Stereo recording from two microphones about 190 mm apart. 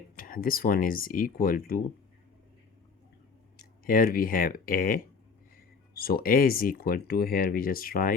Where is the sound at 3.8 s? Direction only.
50° left (ahead or behind).